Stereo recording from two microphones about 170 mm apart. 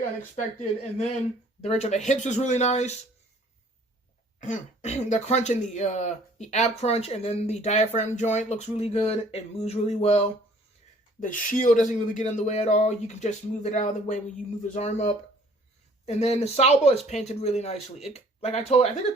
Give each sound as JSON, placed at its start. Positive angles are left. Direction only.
{"t": 1.6, "sound": "speech", "side_deg": 40}
{"t": 4.4, "sound": "speech", "side_deg": 45}
{"t": 11.2, "sound": "speech", "side_deg": 50}